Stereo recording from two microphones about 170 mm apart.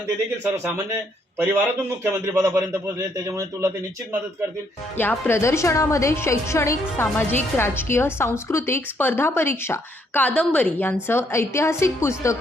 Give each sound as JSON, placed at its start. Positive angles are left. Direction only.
{"t": 1.4, "sound": "a man's voice", "side_deg": -10}
{"t": 4.9, "sound": "a woman's voice", "side_deg": 10}